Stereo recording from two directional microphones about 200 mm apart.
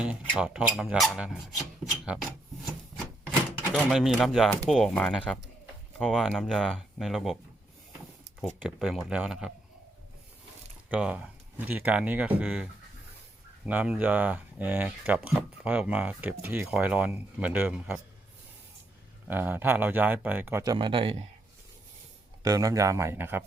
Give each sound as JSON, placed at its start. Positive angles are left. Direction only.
{"t": 0.3, "sound": "speech", "side_deg": -5}
{"t": 3.7, "sound": "speech", "side_deg": 0}
{"t": 8.5, "sound": "speech", "side_deg": 0}
{"t": 10.8, "sound": "speech", "side_deg": -5}
{"t": 13.7, "sound": "speech", "side_deg": -5}
{"t": 19.3, "sound": "speech", "side_deg": -10}
{"t": 20.7, "sound": "speech", "side_deg": -25}
{"t": 22.4, "sound": "speech", "side_deg": -15}